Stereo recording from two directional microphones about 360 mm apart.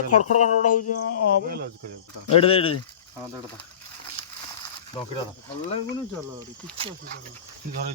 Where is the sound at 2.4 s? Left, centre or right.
Centre.